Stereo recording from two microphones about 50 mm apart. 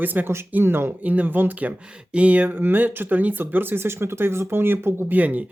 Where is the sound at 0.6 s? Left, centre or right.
Right.